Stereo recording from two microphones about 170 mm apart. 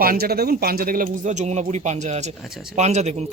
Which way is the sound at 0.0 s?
65° right (ahead or behind).